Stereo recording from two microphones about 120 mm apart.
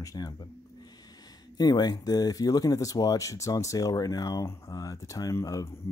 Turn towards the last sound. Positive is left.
turn(degrees=25)  # may be behind; listen again after turning